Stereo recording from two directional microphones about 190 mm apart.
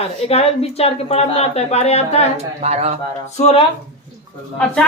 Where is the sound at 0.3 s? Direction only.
35° left (ahead or behind).